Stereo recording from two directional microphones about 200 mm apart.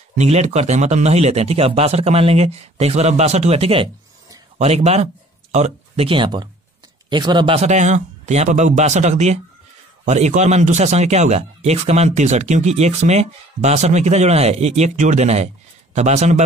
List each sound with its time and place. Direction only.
0.1 s speech: 35° right (ahead or behind)